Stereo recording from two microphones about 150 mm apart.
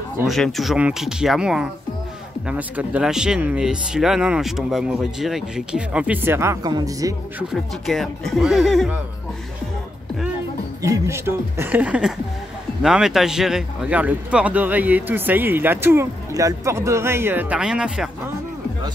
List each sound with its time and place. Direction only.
0.3 s speech: centre (ahead or behind); by 7.2 s 25° right (ahead or behind)
7.5 s speech: centre (ahead or behind)
10.8 s speech: 20° right (ahead or behind)